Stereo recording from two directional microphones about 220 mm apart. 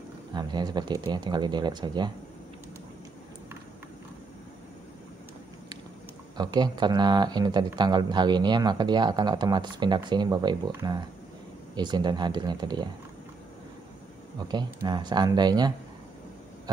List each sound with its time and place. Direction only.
0.3 s speech: 20° right (ahead or behind)
6.3 s speech: 20° right (ahead or behind)
14.5 s speech: 20° right (ahead or behind)